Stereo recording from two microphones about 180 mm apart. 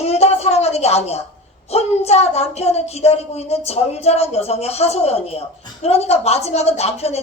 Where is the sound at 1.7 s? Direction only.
35° left (ahead or behind).